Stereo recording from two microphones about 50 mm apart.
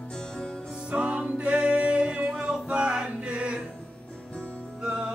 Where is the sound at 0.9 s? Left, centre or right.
Right.